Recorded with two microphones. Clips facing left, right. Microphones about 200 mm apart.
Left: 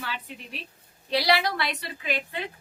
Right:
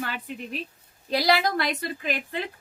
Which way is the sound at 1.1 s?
45° right (ahead or behind).